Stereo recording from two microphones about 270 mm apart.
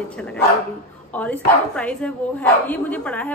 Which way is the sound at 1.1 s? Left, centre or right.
Centre.